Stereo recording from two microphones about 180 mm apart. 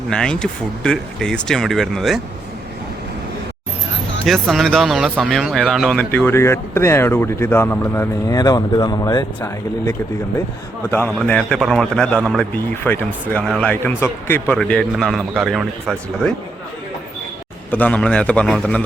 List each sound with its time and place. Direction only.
0.1 s speech: 5° left (ahead or behind)
4.3 s speech: centre (ahead or behind); by 9.9 s 20° left (ahead or behind)
11.1 s speech: 5° left (ahead or behind)
17.7 s speech: 10° left (ahead or behind)